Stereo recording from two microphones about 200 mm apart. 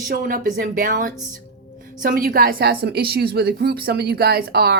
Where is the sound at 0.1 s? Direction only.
45° right (ahead or behind).